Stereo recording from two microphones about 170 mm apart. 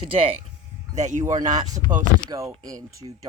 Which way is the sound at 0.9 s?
45° right (ahead or behind).